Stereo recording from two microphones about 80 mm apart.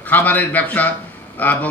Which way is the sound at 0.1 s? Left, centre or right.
Left.